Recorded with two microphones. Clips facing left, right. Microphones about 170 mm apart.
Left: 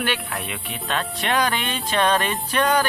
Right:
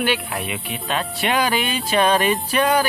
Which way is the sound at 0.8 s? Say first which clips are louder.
Right 2 dB; 5° right (ahead or behind).